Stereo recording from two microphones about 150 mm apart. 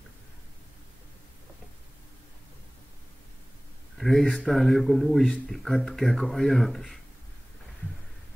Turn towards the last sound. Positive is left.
turn(degrees=0)  # may be behind; listen again after turning